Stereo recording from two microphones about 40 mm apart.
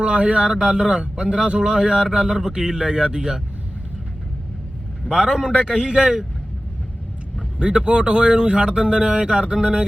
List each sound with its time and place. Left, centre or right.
0.0 s speech: right
5.0 s speech: centre
7.6 s speech: right